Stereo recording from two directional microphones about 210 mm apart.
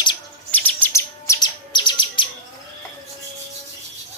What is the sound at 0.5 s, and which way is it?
Chirp, 10° left (ahead or behind).